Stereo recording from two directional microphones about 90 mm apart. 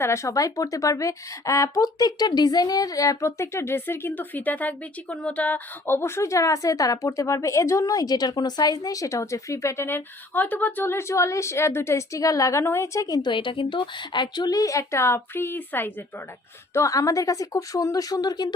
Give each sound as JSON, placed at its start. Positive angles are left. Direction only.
{"t": 0.0, "sound": "speech", "side_deg": 30}
{"t": 13.2, "sound": "speech", "side_deg": 65}
{"t": 16.7, "sound": "speech", "side_deg": 35}